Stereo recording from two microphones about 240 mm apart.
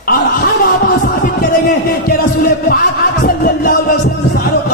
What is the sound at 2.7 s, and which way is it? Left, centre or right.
Music, left.